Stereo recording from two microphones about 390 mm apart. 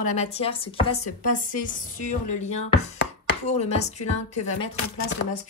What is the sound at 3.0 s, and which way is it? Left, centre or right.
Chopping, centre.